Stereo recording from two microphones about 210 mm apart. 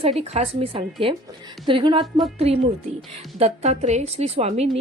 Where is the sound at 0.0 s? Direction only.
30° right (ahead or behind).